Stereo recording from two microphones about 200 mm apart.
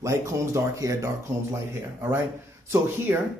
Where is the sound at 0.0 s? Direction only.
15° right (ahead or behind).